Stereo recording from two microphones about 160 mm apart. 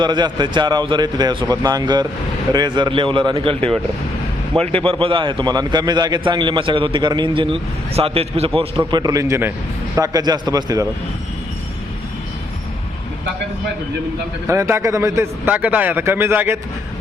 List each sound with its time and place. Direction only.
0.0 s a man's voice: 30° right (ahead or behind)
8.9 s speech: 25° right (ahead or behind)
14.4 s a man's voice: 15° right (ahead or behind)